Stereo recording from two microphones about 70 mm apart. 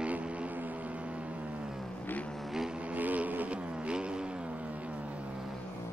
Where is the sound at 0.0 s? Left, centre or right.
Centre.